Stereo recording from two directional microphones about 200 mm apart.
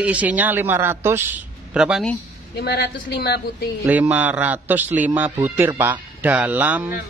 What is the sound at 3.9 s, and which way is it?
Speech, 10° right (ahead or behind).